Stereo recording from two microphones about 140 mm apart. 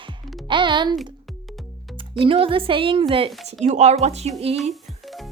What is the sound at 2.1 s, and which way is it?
Speech, 40° right (ahead or behind).